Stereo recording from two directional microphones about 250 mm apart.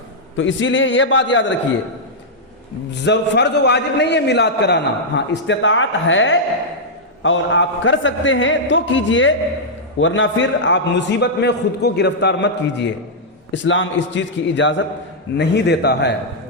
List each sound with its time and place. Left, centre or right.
0.3 s a man's voice: left
2.9 s a man's voice: left